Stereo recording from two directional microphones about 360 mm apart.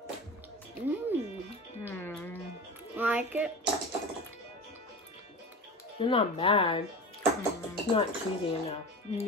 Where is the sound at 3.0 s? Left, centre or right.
Centre.